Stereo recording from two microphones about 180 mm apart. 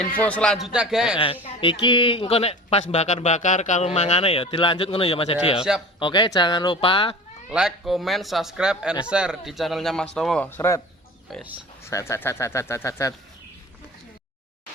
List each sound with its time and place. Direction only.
0.2 s a man's voice: 5° left (ahead or behind)
1.2 s speech: 30° left (ahead or behind)
7.5 s a man's voice: centre (ahead or behind)
11.9 s speech: 15° left (ahead or behind)